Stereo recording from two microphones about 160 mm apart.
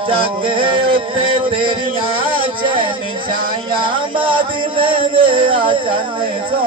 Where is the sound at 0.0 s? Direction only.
30° right (ahead or behind).